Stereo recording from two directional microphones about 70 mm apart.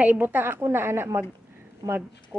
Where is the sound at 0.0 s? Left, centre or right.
Right.